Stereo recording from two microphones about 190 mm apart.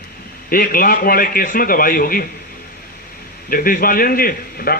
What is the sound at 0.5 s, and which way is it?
A man's voice, 50° left (ahead or behind).